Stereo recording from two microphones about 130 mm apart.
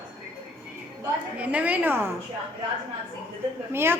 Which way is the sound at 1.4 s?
10° right (ahead or behind).